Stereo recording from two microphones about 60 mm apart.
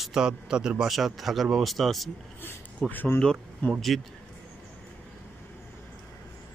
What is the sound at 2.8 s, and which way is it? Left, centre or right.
Speech, centre.